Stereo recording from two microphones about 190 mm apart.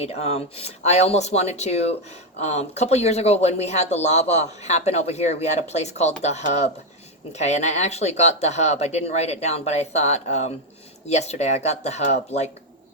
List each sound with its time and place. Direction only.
0.0 s speech: 30° left (ahead or behind)